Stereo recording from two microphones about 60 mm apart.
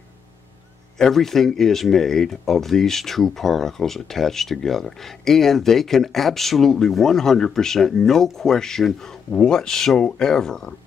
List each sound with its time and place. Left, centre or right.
0.9 s speech: centre